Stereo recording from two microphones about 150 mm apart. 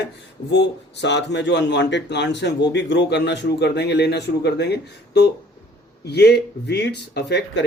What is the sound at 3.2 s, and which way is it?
Speech, 90° left.